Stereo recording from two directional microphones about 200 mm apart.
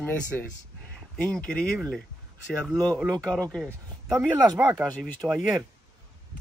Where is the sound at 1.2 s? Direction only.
5° left (ahead or behind).